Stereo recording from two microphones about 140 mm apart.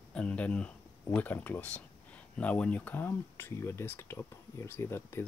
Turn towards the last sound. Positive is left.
turn(degrees=15)  # may be behind; listen again after turning